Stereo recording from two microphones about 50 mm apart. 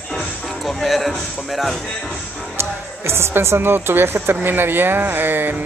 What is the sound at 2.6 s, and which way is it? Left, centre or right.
Speech, right.